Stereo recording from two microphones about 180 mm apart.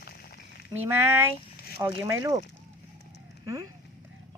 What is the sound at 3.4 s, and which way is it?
Speech, 15° right (ahead or behind).